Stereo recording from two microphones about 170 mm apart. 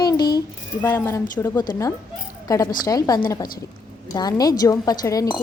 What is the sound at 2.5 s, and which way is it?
A woman's voice, 20° left (ahead or behind).